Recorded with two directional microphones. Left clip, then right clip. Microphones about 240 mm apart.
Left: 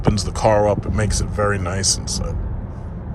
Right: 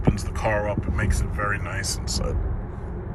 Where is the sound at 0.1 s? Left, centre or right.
Left.